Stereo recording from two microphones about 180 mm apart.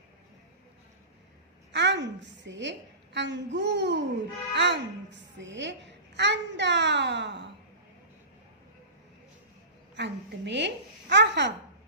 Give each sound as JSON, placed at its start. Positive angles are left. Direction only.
{"t": 1.7, "sound": "a woman's voice", "side_deg": -75}
{"t": 9.9, "sound": "a woman's voice", "side_deg": -75}